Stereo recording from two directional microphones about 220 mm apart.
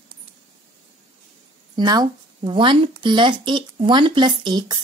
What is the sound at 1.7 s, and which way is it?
Speech, 20° right (ahead or behind).